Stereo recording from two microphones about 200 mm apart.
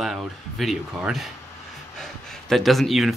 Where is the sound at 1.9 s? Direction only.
Centre (ahead or behind).